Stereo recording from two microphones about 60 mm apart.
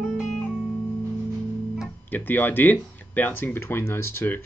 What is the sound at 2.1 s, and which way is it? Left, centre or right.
Speech, left.